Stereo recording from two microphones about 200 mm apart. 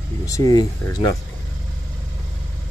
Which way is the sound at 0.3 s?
20° left (ahead or behind).